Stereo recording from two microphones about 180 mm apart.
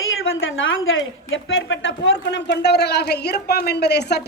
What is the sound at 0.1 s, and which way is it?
A woman's voice, 90° left.